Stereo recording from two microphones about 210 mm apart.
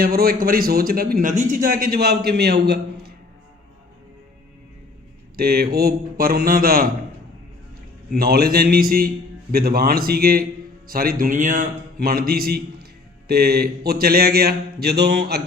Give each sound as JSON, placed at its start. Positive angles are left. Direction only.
{"t": 0.0, "sound": "a man's voice", "side_deg": -45}
{"t": 5.4, "sound": "a man's voice", "side_deg": -45}
{"t": 8.1, "sound": "a man's voice", "side_deg": -50}